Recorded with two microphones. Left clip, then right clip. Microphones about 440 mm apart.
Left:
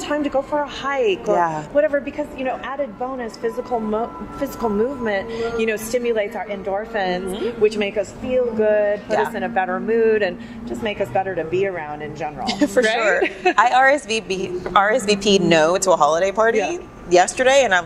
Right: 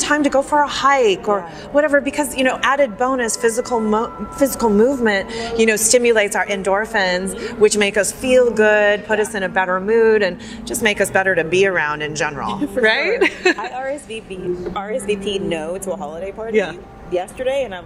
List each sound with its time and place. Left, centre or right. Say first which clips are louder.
0.0 s speech: right 5 dB; right
13.6 s a woman's voice: left 11 dB; left